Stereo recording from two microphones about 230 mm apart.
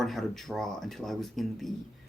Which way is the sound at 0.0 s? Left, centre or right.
Centre.